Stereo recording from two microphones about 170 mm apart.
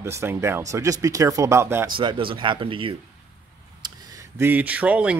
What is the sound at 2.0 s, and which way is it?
Speech, 30° right (ahead or behind).